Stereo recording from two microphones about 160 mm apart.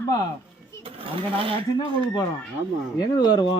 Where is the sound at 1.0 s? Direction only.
35° right (ahead or behind).